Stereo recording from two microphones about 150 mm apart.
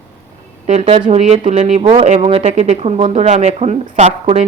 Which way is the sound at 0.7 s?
45° right (ahead or behind).